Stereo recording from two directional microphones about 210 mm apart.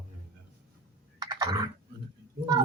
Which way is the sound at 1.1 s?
20° right (ahead or behind).